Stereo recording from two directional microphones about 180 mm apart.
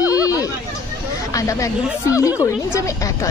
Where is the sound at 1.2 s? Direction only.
20° left (ahead or behind).